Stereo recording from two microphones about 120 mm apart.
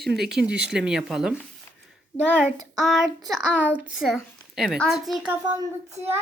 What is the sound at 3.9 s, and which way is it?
A woman's voice, centre (ahead or behind).